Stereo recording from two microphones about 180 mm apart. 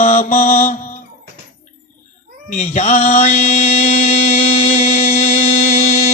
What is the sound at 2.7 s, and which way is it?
Mantra, 40° left (ahead or behind).